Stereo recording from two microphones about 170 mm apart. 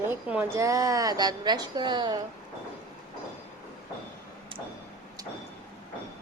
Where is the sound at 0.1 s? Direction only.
10° right (ahead or behind).